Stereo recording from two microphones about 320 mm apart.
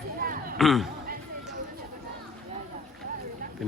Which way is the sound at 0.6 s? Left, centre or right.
Centre.